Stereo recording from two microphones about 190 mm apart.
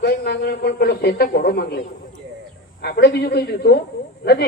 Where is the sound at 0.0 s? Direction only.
60° left (ahead or behind).